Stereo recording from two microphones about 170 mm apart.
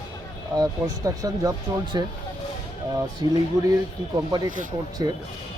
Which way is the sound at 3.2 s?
30° left (ahead or behind).